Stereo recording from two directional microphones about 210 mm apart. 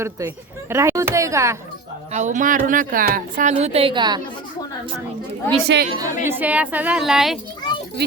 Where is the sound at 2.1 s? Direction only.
35° right (ahead or behind).